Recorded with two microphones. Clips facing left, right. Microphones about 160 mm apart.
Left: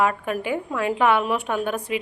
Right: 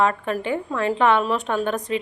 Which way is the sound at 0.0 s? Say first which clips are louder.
Right 1 dB; 10° left (ahead or behind).